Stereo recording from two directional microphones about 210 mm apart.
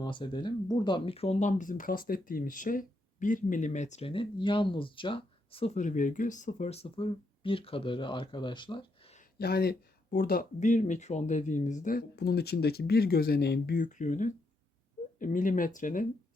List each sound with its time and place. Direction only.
0.0 s speech: 20° left (ahead or behind)
9.1 s speech: 45° left (ahead or behind)